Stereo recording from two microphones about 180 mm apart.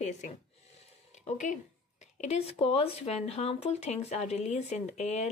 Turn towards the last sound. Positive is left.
turn(degrees=40)  # may be behind; listen again after turning